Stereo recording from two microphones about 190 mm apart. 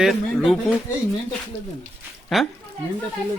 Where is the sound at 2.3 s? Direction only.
Centre (ahead or behind).